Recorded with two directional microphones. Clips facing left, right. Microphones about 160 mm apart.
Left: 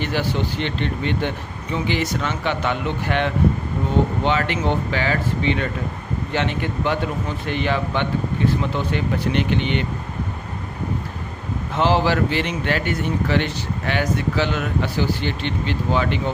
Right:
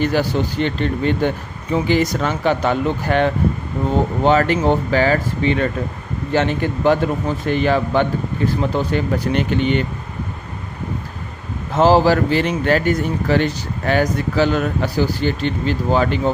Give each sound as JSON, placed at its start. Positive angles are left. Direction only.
{"t": 0.0, "sound": "speech", "side_deg": -40}
{"t": 11.7, "sound": "speech", "side_deg": -40}